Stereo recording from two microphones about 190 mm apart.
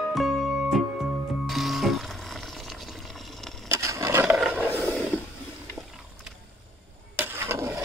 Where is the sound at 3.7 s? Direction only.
15° right (ahead or behind).